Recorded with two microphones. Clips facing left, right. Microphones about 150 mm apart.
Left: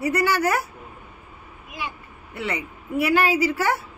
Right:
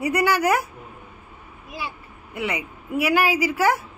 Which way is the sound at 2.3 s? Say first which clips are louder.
Right 1 dB; 10° right (ahead or behind).